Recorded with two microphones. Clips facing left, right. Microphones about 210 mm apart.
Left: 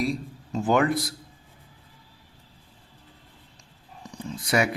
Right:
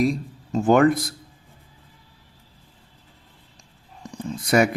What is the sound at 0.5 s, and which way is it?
Speech, 45° right (ahead or behind).